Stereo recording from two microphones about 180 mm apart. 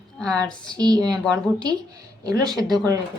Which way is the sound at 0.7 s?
20° right (ahead or behind).